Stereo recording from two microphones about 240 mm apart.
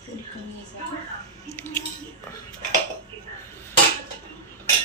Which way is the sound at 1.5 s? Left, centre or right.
Centre.